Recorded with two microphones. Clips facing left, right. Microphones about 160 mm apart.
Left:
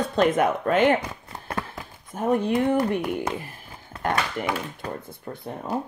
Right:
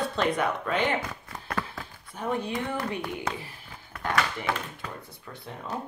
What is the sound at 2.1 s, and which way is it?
Speech, 45° left (ahead or behind).